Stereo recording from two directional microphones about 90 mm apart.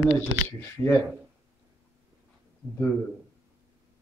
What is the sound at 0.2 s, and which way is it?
Speech, 25° left (ahead or behind).